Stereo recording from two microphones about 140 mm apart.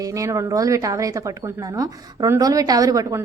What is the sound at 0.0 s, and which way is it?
Speech, 25° right (ahead or behind).